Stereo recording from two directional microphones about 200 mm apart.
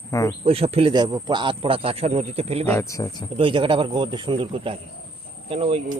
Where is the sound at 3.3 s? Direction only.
25° right (ahead or behind).